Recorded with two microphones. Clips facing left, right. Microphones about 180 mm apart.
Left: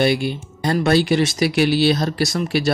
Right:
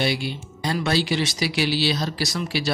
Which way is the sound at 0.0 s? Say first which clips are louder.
Left 7 dB; 50° left (ahead or behind).